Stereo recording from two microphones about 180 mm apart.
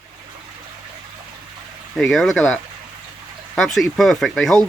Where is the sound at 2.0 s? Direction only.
Centre (ahead or behind).